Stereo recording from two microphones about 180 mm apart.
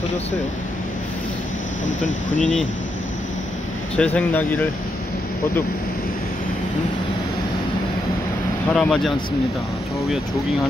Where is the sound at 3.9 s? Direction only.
5° left (ahead or behind).